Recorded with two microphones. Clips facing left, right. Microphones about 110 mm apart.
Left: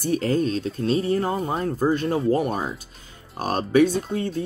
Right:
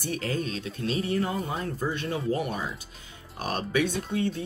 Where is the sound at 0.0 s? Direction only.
40° left (ahead or behind).